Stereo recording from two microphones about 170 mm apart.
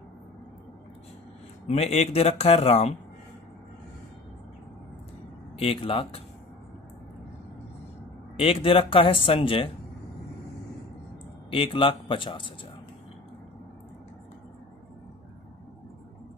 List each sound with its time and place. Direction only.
1.7 s speech: 40° left (ahead or behind)
5.6 s speech: 35° left (ahead or behind)
8.4 s speech: 35° left (ahead or behind)
11.5 s a man's voice: 30° left (ahead or behind)